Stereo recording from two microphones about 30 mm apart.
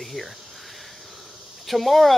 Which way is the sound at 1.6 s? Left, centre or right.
Centre.